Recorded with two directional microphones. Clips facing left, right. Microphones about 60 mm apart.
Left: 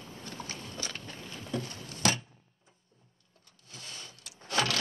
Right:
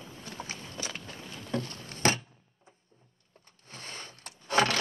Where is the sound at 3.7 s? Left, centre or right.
Right.